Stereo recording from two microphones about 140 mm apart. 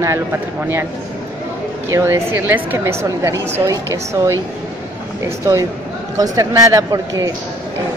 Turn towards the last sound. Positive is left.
turn(degrees=-25)  # may be behind; listen again after turning